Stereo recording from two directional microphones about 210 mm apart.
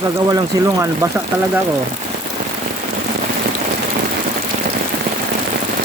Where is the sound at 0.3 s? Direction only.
20° right (ahead or behind).